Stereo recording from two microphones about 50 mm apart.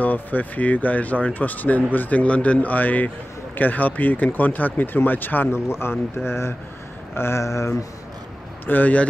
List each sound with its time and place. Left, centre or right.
0.0 s speech: left
5.5 s speech: left
8.6 s speech: left